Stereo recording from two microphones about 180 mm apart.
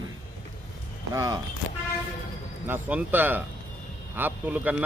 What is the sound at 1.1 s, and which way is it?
Speech, 20° right (ahead or behind).